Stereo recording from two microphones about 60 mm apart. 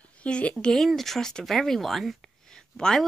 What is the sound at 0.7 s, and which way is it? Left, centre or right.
Speech, centre.